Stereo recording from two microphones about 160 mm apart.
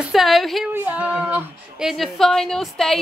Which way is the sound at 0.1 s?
Centre (ahead or behind).